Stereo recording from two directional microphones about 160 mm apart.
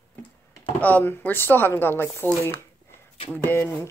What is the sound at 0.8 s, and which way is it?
Speech, 10° left (ahead or behind).